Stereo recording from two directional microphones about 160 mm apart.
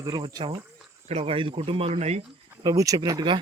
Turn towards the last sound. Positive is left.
turn(degrees=-25)  # may be behind; listen again after turning